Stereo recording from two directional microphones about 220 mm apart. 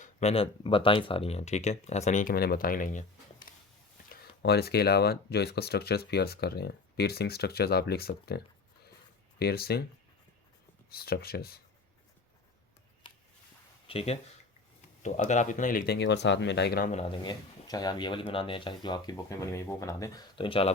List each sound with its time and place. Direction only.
0.0 s speech: 30° left (ahead or behind)
3.5 s a sound: 40° left (ahead or behind)
4.1 s speech: 45° left (ahead or behind)
9.4 s speech: 45° left (ahead or behind)
10.8 s speech: 45° left (ahead or behind)
13.0 s a sound: 20° left (ahead or behind)
13.8 s speech: 25° left (ahead or behind); by 17.0 s 40° left (ahead or behind)
17.0 s speech: 20° left (ahead or behind)